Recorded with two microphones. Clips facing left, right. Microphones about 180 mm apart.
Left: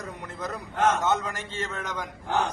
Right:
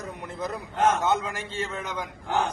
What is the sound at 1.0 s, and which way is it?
A man's voice, 15° right (ahead or behind).